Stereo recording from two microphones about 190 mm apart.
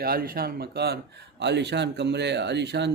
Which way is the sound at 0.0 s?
50° right (ahead or behind).